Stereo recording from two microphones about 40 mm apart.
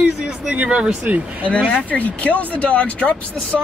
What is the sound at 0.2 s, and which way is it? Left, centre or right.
Speech, right.